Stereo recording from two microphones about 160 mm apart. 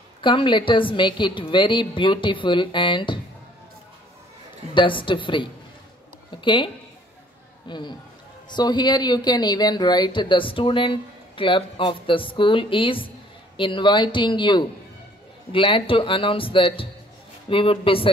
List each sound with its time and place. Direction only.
0.2 s speech: 30° left (ahead or behind)
4.7 s speech: 30° left (ahead or behind)